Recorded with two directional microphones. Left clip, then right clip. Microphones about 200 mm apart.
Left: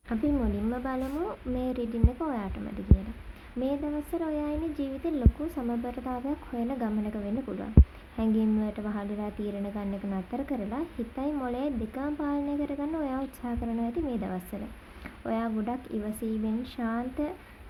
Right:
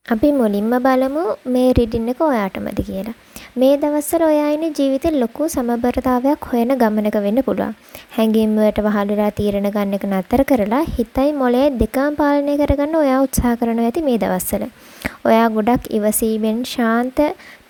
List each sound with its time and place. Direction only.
0.1 s a woman's voice: 60° right (ahead or behind)
3.6 s a woman's voice: 55° right (ahead or behind)